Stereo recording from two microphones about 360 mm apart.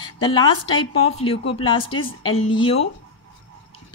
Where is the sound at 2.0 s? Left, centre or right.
Left.